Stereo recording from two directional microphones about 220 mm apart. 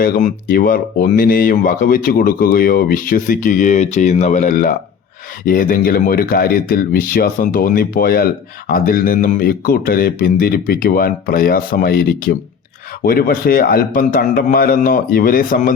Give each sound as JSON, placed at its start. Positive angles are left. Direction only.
{"t": 0.0, "sound": "speech", "side_deg": 40}